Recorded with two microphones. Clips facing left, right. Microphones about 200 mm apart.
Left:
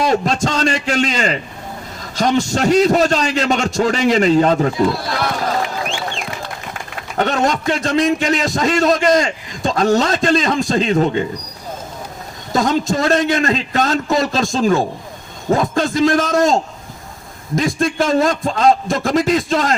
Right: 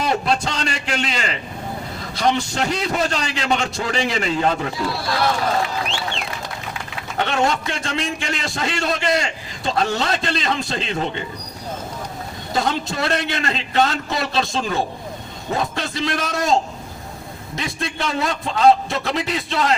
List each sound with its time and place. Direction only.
0.1 s a man's voice: 40° left (ahead or behind)
7.2 s a man's voice: 45° left (ahead or behind)
12.5 s a man's voice: 45° left (ahead or behind)